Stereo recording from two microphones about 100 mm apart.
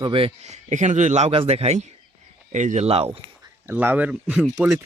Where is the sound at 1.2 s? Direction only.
80° right.